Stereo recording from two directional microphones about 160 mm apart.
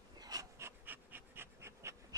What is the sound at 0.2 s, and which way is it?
Bee, 20° right (ahead or behind).